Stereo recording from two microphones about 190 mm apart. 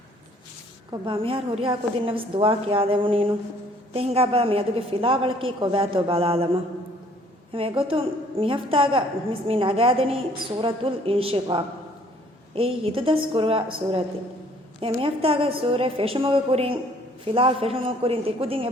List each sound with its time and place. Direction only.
0.9 s a woman's voice: 25° right (ahead or behind)